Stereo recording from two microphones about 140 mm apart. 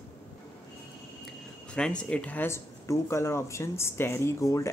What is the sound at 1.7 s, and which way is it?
Speech, 5° left (ahead or behind).